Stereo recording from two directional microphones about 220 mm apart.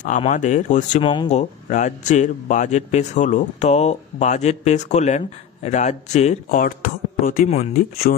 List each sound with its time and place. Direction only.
0.0 s speech: 35° left (ahead or behind)